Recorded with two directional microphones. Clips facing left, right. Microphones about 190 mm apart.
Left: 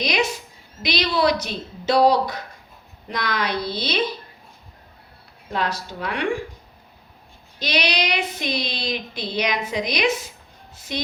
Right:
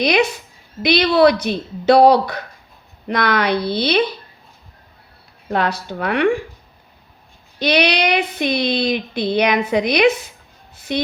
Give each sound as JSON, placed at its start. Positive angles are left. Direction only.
{"t": 0.0, "sound": "a woman's voice", "side_deg": -60}
{"t": 0.8, "sound": "child singing", "side_deg": -60}
{"t": 5.5, "sound": "child singing", "side_deg": -60}
{"t": 7.6, "sound": "child singing", "side_deg": -60}
{"t": 10.8, "sound": "speech", "side_deg": -60}